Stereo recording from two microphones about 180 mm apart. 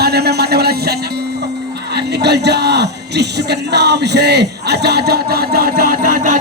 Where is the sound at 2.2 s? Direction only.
65° right (ahead or behind); by 6.4 s 45° right (ahead or behind).